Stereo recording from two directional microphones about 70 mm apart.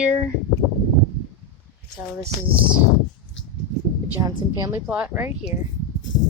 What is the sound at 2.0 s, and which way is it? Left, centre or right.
Speech, right.